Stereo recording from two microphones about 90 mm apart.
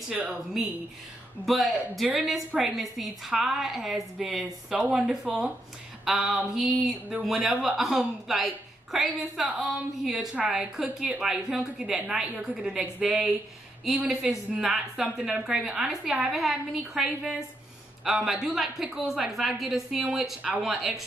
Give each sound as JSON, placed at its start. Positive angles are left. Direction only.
{"t": 0.1, "sound": "a woman's voice", "side_deg": -15}
{"t": 1.4, "sound": "a woman's voice", "side_deg": 0}
{"t": 4.7, "sound": "a woman's voice", "side_deg": -15}